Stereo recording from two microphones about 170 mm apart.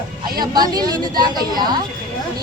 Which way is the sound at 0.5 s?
20° right (ahead or behind).